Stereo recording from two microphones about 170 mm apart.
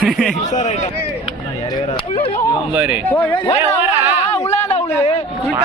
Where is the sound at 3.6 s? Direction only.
15° right (ahead or behind).